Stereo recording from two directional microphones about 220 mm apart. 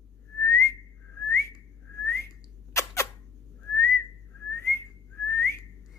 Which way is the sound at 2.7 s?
15° left (ahead or behind).